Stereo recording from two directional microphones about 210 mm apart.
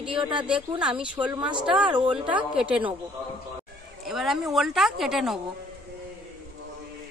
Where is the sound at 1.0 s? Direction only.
5° right (ahead or behind).